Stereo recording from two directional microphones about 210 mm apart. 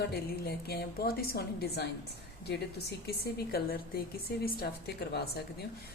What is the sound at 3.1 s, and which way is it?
A woman's voice, 50° left (ahead or behind).